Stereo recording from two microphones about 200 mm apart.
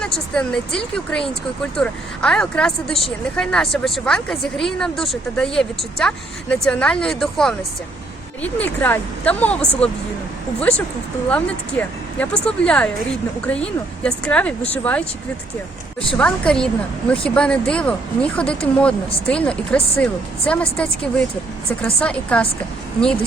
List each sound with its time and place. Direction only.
0.0 s speech: 5° left (ahead or behind)
16.1 s speech: 5° left (ahead or behind)